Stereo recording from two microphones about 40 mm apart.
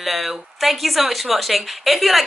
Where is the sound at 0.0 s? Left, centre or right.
Centre.